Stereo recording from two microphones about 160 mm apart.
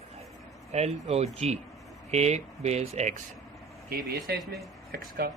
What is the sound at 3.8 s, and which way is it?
Speech, 70° right (ahead or behind).